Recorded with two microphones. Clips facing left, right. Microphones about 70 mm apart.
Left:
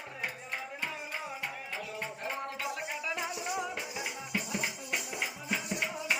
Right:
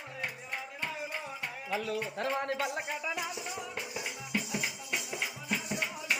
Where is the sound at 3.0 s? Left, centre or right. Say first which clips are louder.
Even; centre.